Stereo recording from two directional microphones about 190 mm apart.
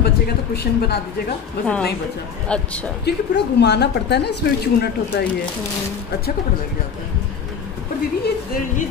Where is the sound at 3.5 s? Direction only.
65° left (ahead or behind).